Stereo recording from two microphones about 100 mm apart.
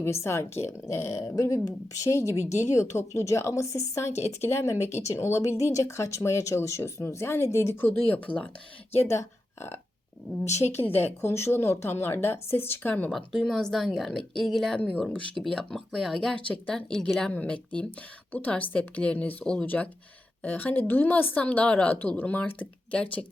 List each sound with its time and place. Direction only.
0.0 s speech: 25° left (ahead or behind)
7.9 s speech: 15° left (ahead or behind)
9.0 s speech: 25° left (ahead or behind)
13.1 s speech: 5° left (ahead or behind)